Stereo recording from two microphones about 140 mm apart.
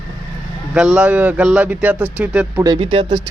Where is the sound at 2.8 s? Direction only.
40° right (ahead or behind).